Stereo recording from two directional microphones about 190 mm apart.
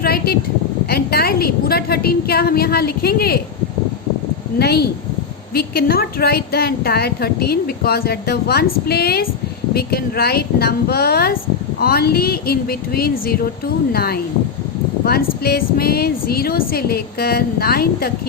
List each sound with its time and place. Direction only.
0.0 s a sound: 55° left (ahead or behind)
0.9 s a woman's voice: 55° left (ahead or behind)
4.6 s a woman's voice: 55° left (ahead or behind)